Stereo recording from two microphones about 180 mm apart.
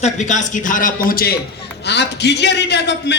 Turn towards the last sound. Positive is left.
turn(degrees=70)  # may be behind; listen again after turning